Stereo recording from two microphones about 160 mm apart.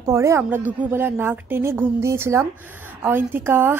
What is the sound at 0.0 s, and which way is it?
A woman's voice, 20° right (ahead or behind).